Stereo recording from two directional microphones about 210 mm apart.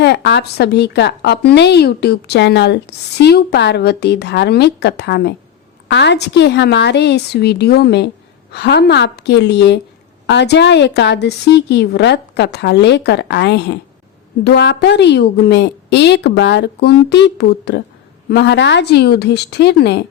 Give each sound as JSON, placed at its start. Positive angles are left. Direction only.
{"t": 0.0, "sound": "a woman's voice", "side_deg": 50}